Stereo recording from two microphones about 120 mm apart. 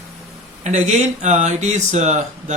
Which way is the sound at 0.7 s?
75° right (ahead or behind).